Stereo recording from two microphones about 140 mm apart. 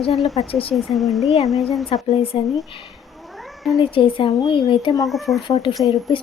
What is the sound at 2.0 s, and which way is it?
Speech, 40° left (ahead or behind).